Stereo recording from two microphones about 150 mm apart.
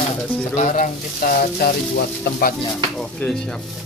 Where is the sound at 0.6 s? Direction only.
60° left (ahead or behind); by 2.5 s 85° left.